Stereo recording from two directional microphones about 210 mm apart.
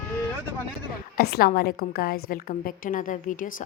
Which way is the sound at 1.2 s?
45° left (ahead or behind).